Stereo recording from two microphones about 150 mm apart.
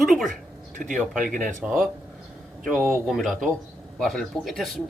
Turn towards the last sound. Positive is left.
turn(degrees=0)  # may be behind; listen again after turning